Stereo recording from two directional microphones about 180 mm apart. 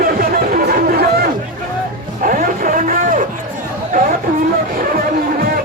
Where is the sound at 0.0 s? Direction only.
55° right (ahead or behind).